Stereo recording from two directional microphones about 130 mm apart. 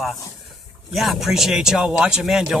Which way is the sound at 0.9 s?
Centre (ahead or behind).